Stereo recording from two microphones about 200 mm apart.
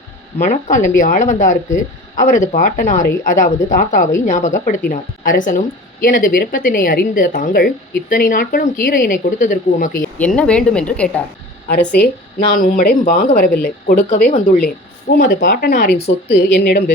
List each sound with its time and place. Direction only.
0.3 s a woman's voice: 40° left (ahead or behind)
10.2 s speech: 5° left (ahead or behind)
12.5 s a woman's voice: 45° left (ahead or behind)
15.2 s a woman's voice: 55° left (ahead or behind)